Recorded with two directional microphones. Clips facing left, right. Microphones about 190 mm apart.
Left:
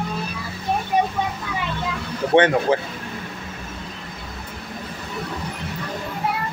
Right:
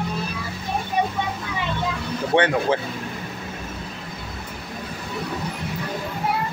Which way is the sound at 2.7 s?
15° left (ahead or behind).